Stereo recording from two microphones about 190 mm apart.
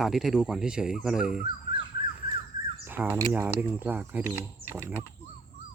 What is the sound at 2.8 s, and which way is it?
Speech, 10° right (ahead or behind).